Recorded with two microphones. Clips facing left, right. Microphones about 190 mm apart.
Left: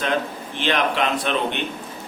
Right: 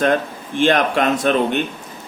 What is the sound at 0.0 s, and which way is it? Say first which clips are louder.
Speech: right 6 dB; 45° right (ahead or behind).